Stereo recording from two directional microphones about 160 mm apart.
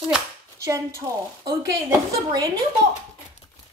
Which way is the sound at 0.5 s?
20° right (ahead or behind).